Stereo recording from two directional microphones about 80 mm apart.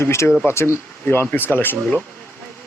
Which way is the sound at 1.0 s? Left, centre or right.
Left.